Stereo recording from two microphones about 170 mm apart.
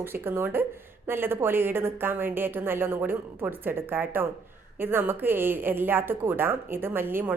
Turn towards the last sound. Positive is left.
turn(degrees=-10)  # may be behind; listen again after turning